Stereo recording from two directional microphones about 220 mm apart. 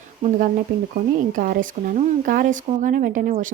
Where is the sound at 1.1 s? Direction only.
40° right (ahead or behind).